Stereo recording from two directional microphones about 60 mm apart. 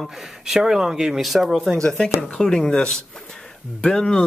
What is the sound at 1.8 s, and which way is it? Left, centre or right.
Speech, centre.